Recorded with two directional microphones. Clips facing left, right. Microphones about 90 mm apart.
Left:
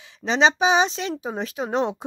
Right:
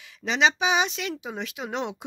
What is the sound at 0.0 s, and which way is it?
Speech, 30° left (ahead or behind).